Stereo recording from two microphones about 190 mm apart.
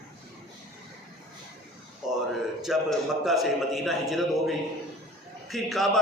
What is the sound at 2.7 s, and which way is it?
A man's voice, centre (ahead or behind).